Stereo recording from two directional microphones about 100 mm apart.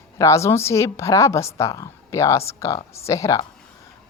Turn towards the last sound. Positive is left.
turn(degrees=30)  # may be behind; listen again after turning